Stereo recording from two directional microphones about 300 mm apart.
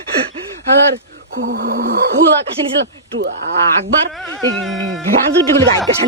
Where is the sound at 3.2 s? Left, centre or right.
Right.